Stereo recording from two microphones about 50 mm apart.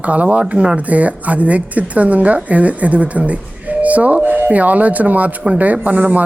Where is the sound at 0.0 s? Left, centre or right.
Right.